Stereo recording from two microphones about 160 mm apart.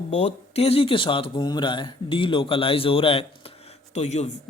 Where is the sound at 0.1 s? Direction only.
40° left (ahead or behind).